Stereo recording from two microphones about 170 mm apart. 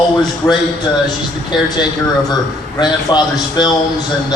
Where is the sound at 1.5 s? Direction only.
25° left (ahead or behind).